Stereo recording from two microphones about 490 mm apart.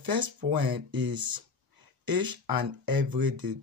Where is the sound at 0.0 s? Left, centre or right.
Right.